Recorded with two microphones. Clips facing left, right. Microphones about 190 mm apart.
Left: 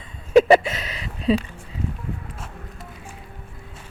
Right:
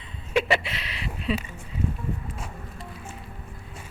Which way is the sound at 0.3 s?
40° left (ahead or behind).